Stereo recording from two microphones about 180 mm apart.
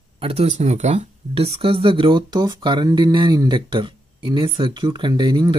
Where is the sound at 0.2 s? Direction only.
35° right (ahead or behind).